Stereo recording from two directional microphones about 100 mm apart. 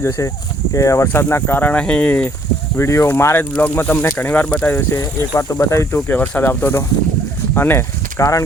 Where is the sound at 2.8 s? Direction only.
30° left (ahead or behind); by 4.7 s 15° left (ahead or behind).